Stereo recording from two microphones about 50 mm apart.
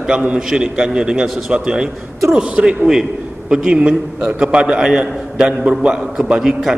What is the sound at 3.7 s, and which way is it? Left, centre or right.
A man's voice, right.